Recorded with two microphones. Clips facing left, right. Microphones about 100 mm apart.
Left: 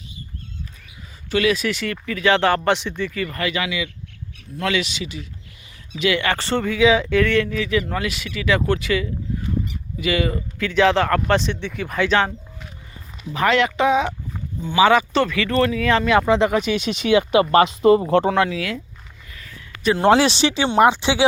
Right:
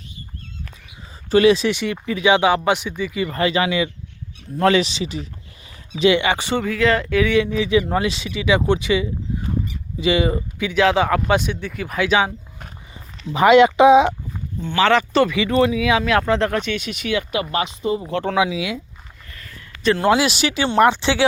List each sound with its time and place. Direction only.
1.3 s speech: 30° right (ahead or behind); by 3.2 s 10° right (ahead or behind)
3.2 s speech: 30° right (ahead or behind)
6.0 s speech: 25° right (ahead or behind)
10.8 s speech: 5° right (ahead or behind)
13.3 s speech: 20° right (ahead or behind)
14.6 s speech: 10° left (ahead or behind)
15.1 s speech: 5° right (ahead or behind); by 17.4 s 25° left (ahead or behind)
17.4 s speech: 40° left (ahead or behind)
17.8 s speech: 60° left (ahead or behind)
18.3 s speech: 10° right (ahead or behind)
19.3 s a sound: 5° left (ahead or behind)
20.0 s speech: 30° left (ahead or behind); by 21.2 s 15° left (ahead or behind)